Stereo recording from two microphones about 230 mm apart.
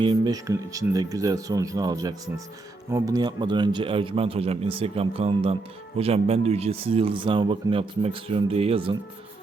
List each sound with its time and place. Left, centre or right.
0.0 s speech: centre